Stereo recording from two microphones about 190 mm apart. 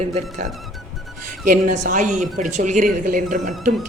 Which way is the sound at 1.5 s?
40° right (ahead or behind).